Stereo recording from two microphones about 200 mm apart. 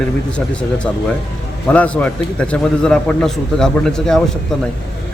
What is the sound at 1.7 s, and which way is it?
A man's voice, 5° left (ahead or behind).